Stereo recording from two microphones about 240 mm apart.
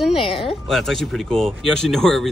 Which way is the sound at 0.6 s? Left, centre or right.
Centre.